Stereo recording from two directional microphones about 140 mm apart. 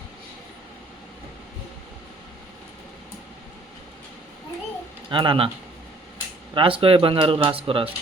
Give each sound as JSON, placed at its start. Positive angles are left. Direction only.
{"t": 5.1, "sound": "speech", "side_deg": -35}
{"t": 6.5, "sound": "speech", "side_deg": -40}